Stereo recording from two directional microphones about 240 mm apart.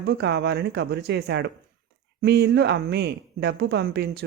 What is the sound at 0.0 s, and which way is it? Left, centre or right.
Speech, right.